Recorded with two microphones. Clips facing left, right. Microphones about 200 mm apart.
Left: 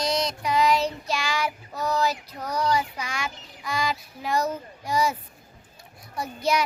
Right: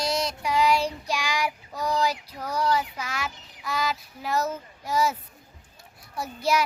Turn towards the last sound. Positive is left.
turn(degrees=-5)  # may be behind; listen again after turning